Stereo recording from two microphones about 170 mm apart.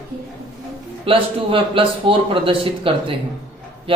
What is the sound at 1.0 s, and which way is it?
Speech, 30° right (ahead or behind).